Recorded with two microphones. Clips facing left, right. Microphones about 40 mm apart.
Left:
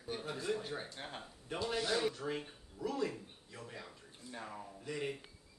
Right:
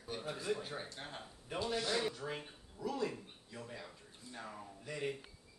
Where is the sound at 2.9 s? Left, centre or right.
Centre.